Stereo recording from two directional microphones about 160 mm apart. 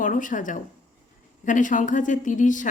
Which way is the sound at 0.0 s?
55° left (ahead or behind).